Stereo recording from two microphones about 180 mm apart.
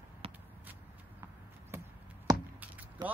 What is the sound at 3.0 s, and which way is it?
Vehicle, 20° right (ahead or behind).